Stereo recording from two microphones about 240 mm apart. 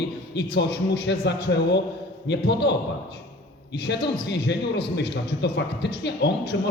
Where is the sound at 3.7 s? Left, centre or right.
Left.